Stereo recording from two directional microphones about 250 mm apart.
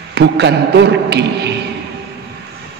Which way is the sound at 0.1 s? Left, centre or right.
Right.